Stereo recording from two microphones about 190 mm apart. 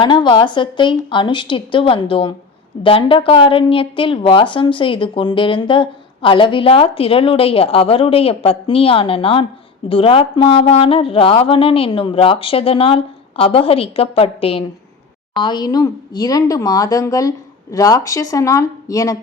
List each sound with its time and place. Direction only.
0.0 s a woman's voice: 25° left (ahead or behind)